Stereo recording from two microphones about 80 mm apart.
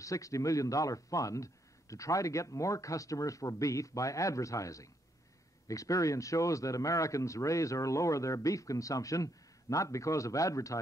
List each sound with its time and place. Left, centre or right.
0.0 s speech: left